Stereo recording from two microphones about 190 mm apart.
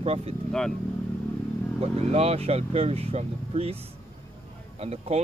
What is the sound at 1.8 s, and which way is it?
Speech, 30° right (ahead or behind).